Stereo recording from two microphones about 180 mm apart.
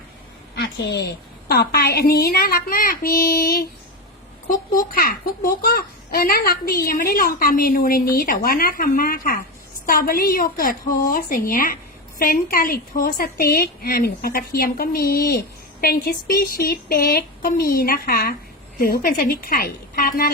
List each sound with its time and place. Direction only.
0.5 s a woman's voice: 75° left (ahead or behind); by 20.3 s 55° left (ahead or behind)